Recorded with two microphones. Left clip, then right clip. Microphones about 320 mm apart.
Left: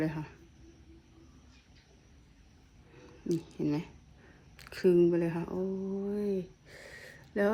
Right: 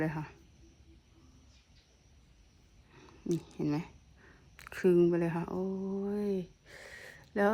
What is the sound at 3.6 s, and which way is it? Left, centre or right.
Speech, centre.